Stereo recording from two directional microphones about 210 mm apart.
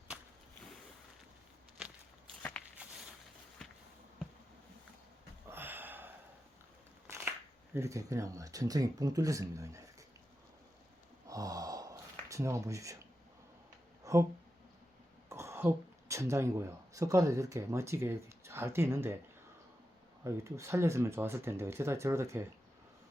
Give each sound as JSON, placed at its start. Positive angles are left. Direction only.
{"t": 5.5, "sound": "a sound", "side_deg": -10}
{"t": 7.1, "sound": "speech", "side_deg": -10}
{"t": 11.3, "sound": "gasp", "side_deg": -15}
{"t": 14.0, "sound": "a sound", "side_deg": -15}
{"t": 15.3, "sound": "speech", "side_deg": -15}
{"t": 20.2, "sound": "speech", "side_deg": -15}